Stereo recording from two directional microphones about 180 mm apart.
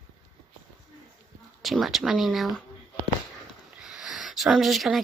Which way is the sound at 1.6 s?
Centre (ahead or behind).